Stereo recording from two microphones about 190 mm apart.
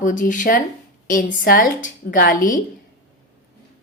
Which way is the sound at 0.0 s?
45° left (ahead or behind).